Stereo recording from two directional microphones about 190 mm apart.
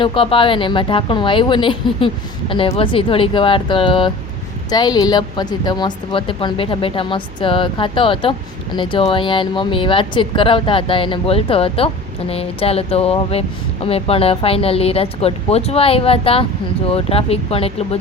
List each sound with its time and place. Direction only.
0.0 s a woman's voice: 25° left (ahead or behind)